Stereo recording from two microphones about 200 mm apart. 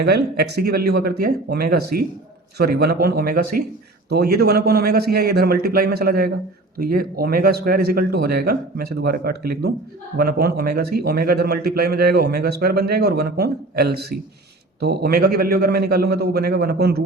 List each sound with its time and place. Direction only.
0.0 s speech: 55° right (ahead or behind)